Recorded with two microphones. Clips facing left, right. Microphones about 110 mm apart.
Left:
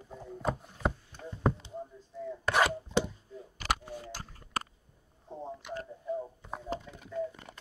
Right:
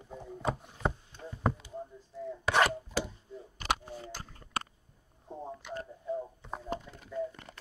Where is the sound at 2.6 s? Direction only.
25° left (ahead or behind).